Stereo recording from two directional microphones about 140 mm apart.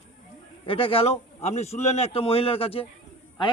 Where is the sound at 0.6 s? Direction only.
40° left (ahead or behind).